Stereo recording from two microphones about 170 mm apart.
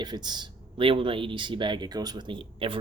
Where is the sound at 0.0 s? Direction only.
25° right (ahead or behind).